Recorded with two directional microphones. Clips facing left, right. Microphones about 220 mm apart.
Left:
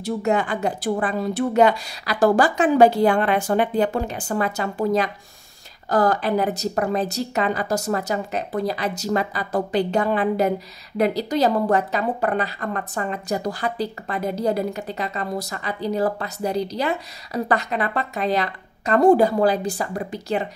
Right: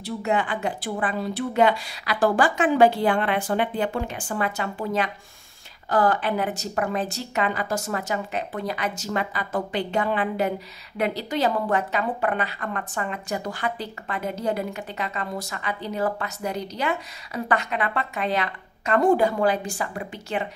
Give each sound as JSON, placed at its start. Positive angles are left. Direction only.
{"t": 0.0, "sound": "a woman's voice", "side_deg": 45}